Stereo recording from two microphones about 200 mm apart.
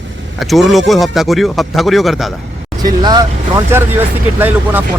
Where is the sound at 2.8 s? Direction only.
20° right (ahead or behind).